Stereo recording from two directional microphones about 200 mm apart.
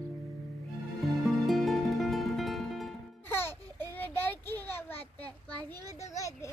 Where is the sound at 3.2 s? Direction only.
10° left (ahead or behind).